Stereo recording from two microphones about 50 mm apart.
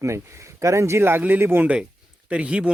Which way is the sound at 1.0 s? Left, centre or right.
Right.